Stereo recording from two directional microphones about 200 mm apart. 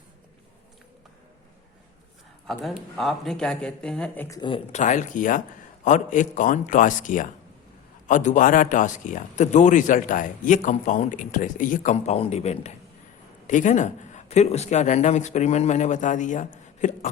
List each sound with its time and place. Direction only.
2.5 s speech: centre (ahead or behind)
4.4 s a man's voice: 25° left (ahead or behind)